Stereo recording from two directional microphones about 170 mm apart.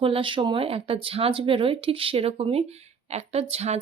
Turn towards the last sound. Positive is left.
turn(degrees=-40)  # may be behind; listen again after turning